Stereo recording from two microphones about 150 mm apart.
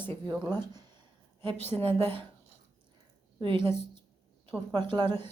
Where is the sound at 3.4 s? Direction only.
30° right (ahead or behind).